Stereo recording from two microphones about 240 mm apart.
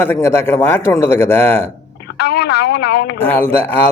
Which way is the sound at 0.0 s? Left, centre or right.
Centre.